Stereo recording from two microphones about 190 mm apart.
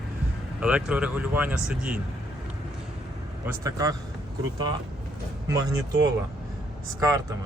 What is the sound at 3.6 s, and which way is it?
Speech, 20° right (ahead or behind).